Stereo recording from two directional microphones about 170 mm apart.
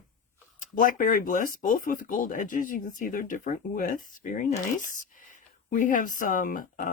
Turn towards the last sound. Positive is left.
turn(degrees=55)  # may be behind; listen again after turning